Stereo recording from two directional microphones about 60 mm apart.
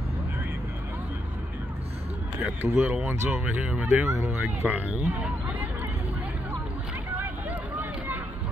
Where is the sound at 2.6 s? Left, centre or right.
Right.